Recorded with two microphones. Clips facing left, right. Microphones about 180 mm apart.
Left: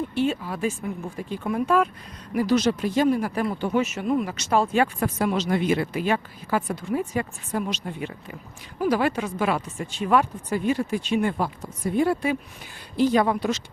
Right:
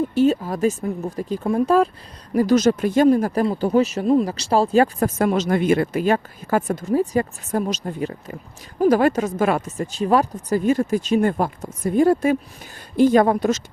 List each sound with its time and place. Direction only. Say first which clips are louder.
0.1 s speech: right 7 dB; 40° right (ahead or behind)